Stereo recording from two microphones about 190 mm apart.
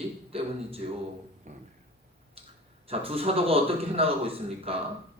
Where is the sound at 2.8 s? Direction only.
30° right (ahead or behind).